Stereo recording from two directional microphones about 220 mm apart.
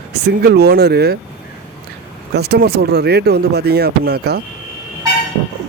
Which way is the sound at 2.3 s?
45° right (ahead or behind).